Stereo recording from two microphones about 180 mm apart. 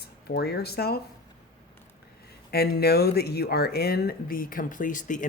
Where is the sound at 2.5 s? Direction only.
60° left (ahead or behind).